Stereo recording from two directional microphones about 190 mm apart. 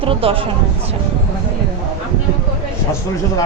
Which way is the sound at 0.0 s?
30° right (ahead or behind).